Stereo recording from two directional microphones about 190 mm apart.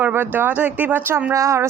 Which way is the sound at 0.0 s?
10° right (ahead or behind).